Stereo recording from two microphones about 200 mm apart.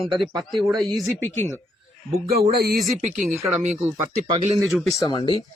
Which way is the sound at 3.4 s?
5° right (ahead or behind).